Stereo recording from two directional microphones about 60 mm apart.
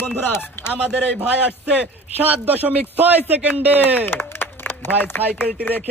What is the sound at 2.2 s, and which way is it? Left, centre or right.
A man's voice, right.